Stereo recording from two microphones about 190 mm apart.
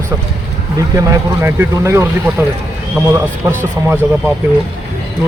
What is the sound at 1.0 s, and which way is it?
Speech, 15° right (ahead or behind).